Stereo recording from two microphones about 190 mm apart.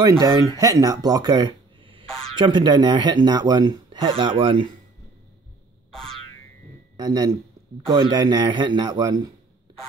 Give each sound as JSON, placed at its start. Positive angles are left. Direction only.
{"t": 0.0, "sound": "speech", "side_deg": -20}
{"t": 5.9, "sound": "boing", "side_deg": 5}
{"t": 7.0, "sound": "speech", "side_deg": -20}